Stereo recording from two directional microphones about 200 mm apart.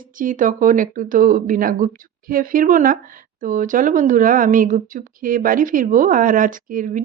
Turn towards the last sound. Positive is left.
turn(degrees=-45)  # may be behind; listen again after turning